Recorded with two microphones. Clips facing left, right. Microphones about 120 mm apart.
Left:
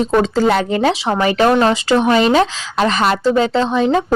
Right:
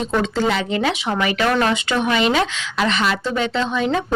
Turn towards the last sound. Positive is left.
turn(degrees=35)  # may be behind; listen again after turning